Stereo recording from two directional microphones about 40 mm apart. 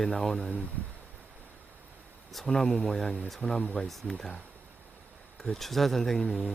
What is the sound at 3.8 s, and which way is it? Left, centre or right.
Speech, centre.